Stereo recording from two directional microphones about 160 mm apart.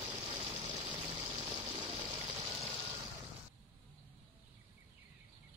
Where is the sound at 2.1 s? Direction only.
20° right (ahead or behind).